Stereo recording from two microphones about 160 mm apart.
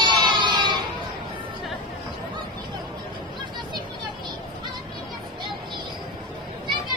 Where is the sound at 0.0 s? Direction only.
30° right (ahead or behind).